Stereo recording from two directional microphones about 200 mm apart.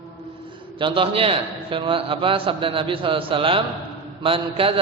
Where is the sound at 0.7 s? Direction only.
25° right (ahead or behind).